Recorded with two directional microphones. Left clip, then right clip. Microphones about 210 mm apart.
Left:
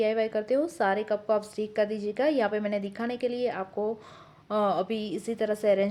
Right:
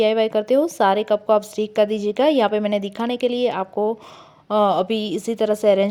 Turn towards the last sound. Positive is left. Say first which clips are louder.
# right 8 dB
turn(degrees=-35)  # may be behind; listen again after turning